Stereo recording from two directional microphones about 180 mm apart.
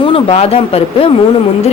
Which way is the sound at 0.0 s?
30° left (ahead or behind).